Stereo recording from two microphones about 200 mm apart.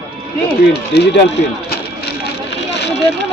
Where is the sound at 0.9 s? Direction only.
55° left (ahead or behind).